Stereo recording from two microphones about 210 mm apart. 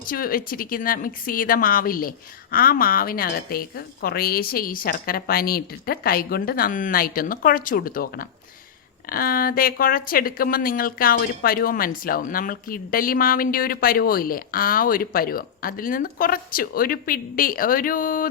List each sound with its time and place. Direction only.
0.1 s speech: 45° left (ahead or behind)